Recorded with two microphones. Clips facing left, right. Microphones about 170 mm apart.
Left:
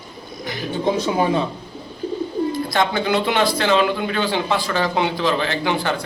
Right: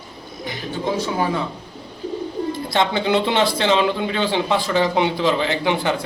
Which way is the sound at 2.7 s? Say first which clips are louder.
Right 5 dB; 25° right (ahead or behind).